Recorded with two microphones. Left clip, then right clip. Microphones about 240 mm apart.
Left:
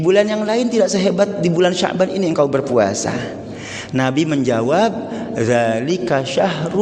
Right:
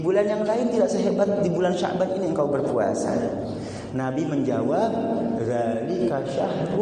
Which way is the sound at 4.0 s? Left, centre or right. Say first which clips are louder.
Left 8 dB; left.